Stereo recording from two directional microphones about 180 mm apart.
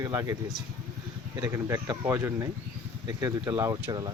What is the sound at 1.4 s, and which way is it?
Speech, 15° right (ahead or behind).